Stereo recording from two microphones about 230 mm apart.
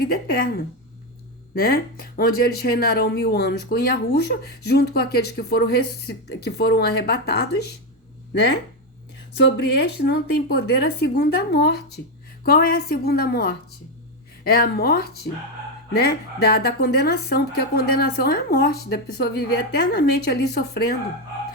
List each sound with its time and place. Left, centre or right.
0.0 s a woman's voice: left
1.5 s speech: left
9.4 s a woman's voice: left